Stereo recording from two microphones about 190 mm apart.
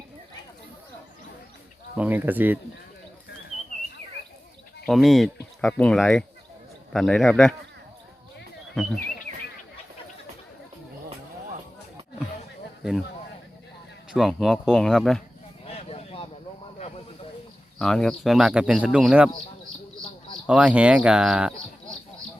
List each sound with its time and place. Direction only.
2.0 s speech: 10° right (ahead or behind)
4.9 s speech: centre (ahead or behind)
8.7 s speech: centre (ahead or behind)
14.1 s speech: centre (ahead or behind)
15.6 s a sound: 30° left (ahead or behind)
17.7 s speech: 5° left (ahead or behind)
20.5 s speech: 5° right (ahead or behind)